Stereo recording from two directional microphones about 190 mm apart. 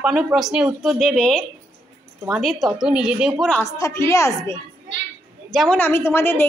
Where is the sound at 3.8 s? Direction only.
15° left (ahead or behind).